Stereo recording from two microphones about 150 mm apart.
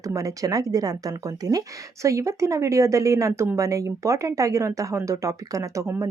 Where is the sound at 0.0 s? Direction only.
20° right (ahead or behind).